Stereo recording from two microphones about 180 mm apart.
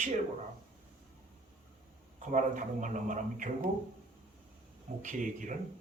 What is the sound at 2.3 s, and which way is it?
A man's voice, 45° right (ahead or behind).